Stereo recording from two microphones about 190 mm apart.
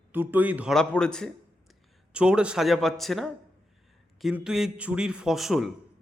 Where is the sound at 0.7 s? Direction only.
5° left (ahead or behind).